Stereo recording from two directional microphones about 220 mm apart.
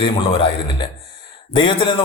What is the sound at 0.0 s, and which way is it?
A man's voice, 25° left (ahead or behind).